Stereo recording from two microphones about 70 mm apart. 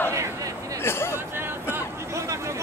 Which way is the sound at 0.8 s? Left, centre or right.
Left.